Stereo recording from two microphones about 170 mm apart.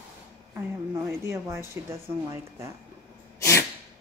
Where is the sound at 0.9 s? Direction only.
15° right (ahead or behind).